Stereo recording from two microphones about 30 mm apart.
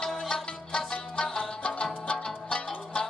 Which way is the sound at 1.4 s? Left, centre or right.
Left.